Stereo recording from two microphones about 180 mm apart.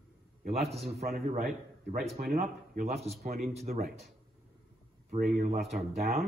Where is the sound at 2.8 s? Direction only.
35° right (ahead or behind).